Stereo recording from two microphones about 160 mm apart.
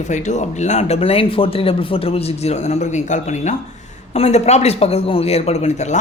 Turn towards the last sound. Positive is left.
turn(degrees=45)  # may be behind; listen again after turning